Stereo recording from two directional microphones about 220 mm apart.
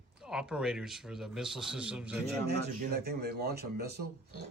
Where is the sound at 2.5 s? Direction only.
45° right (ahead or behind).